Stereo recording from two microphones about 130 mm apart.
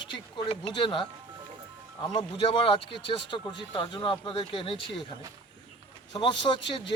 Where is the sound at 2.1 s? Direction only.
40° left (ahead or behind).